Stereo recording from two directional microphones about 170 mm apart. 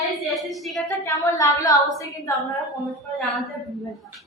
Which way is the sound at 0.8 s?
20° left (ahead or behind).